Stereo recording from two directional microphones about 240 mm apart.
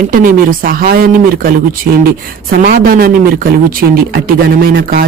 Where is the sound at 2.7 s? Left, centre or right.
Right.